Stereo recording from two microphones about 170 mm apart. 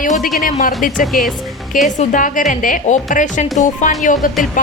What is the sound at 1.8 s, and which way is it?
A woman's voice, 50° left (ahead or behind).